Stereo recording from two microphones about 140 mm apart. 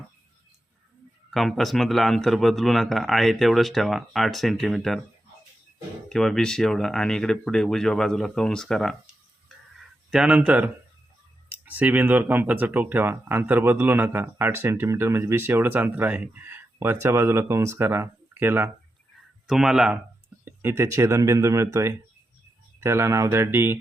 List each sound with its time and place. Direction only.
1.3 s speech: centre (ahead or behind)
6.1 s speech: 5° left (ahead or behind)
10.1 s speech: 5° right (ahead or behind)
19.5 s speech: 5° right (ahead or behind)
20.4 s speech: 15° right (ahead or behind)